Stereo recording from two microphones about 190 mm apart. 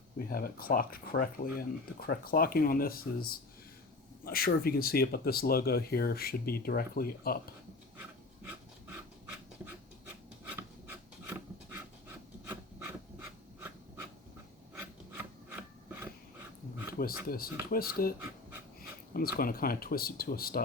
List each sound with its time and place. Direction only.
0.3 s speech: 50° left (ahead or behind)
10.5 s filing: 10° right (ahead or behind)
12.5 s a sound: 10° right (ahead or behind)
14.8 s rub: 15° right (ahead or behind)
17.2 s speech: 50° left (ahead or behind)
19.1 s speech: 50° left (ahead or behind)